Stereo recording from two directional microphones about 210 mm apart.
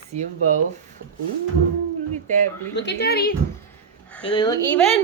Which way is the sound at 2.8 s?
55° left (ahead or behind).